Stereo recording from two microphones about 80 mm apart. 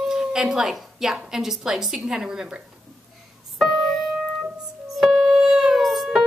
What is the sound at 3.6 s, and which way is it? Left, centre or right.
Music, centre.